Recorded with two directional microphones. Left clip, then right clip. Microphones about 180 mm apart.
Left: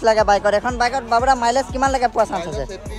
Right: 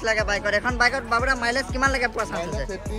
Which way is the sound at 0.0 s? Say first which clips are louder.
Left 8 dB; 15° left (ahead or behind).